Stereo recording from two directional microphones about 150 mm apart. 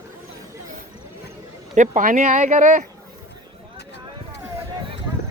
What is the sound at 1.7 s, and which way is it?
Speech, 60° right (ahead or behind).